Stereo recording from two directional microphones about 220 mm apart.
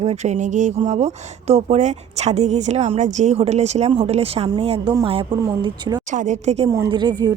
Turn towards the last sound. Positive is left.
turn(degrees=-20)  # may be behind; listen again after turning